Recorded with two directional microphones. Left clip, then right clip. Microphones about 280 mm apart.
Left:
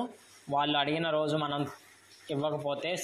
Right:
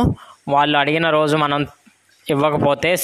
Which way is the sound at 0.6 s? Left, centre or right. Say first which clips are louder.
Right 11 dB; right.